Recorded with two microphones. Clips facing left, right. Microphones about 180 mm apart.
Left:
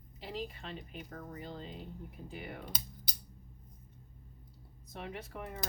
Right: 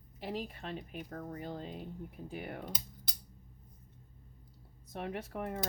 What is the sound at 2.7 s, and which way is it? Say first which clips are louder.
Music: even; centre (ahead or behind).